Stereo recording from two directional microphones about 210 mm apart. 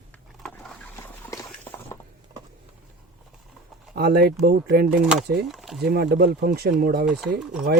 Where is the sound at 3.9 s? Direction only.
50° right (ahead or behind).